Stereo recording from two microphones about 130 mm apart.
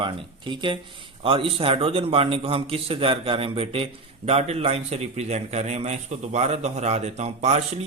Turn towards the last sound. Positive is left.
turn(degrees=-60)  # may be behind; listen again after turning